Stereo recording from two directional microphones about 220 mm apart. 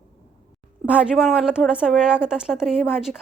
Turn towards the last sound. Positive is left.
turn(degrees=0)  # may be behind; listen again after turning